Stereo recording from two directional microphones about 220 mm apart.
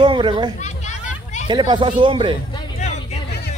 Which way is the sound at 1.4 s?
20° right (ahead or behind).